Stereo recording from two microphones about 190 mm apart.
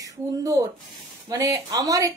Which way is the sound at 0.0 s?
20° right (ahead or behind).